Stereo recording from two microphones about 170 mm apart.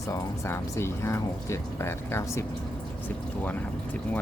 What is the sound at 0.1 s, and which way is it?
Speech, 15° left (ahead or behind).